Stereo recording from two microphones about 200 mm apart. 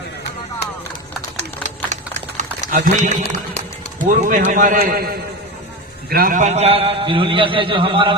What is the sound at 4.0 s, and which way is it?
A man's voice, 40° right (ahead or behind).